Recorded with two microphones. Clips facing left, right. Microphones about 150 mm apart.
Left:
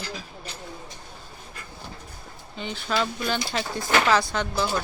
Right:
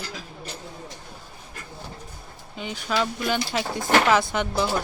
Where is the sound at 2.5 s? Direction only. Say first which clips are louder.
Right 1 dB; 5° right (ahead or behind).